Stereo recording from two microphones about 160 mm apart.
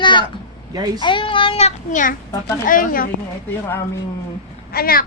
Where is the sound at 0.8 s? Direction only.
25° right (ahead or behind).